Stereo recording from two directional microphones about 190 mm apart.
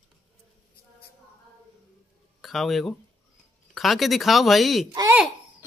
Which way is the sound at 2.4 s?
Centre (ahead or behind).